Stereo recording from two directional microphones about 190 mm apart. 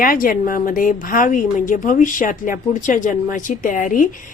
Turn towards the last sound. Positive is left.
turn(degrees=45)  # may be behind; listen again after turning